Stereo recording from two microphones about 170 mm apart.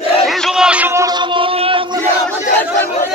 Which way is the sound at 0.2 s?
Centre (ahead or behind).